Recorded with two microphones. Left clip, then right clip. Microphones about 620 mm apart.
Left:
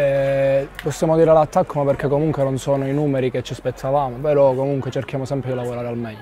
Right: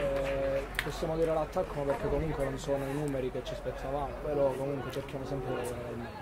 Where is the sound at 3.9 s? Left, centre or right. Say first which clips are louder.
Left 16 dB; left.